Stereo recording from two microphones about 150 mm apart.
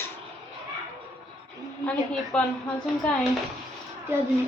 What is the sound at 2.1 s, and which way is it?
Speech, 5° left (ahead or behind).